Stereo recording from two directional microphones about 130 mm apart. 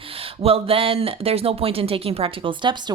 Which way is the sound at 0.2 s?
45° right (ahead or behind).